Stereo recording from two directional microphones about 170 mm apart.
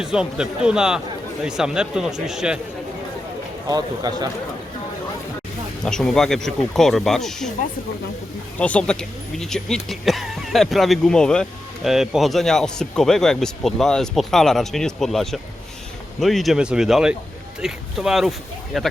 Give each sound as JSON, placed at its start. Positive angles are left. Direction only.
{"t": 0.0, "sound": "speech", "side_deg": -5}
{"t": 3.7, "sound": "a man's voice", "side_deg": -25}
{"t": 5.8, "sound": "speech", "side_deg": 5}
{"t": 8.5, "sound": "speech", "side_deg": 10}